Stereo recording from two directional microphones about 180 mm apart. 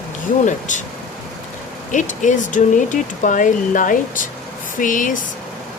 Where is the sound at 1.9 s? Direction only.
45° left (ahead or behind).